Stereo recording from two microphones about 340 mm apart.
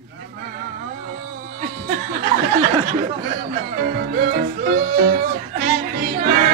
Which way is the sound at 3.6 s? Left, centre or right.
Right.